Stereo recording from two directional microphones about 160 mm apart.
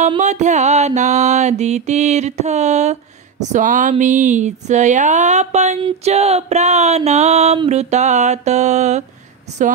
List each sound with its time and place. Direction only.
0.2 s mantra: 45° right (ahead or behind)